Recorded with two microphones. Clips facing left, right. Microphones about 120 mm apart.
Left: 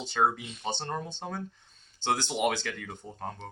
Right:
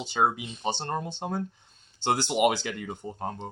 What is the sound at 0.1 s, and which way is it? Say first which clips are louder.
Speech: right 1 dB; 15° right (ahead or behind).